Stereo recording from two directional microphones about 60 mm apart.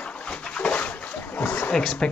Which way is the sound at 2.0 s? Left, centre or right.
Centre.